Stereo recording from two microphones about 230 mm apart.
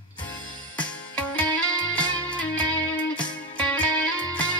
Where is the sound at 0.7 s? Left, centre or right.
Centre.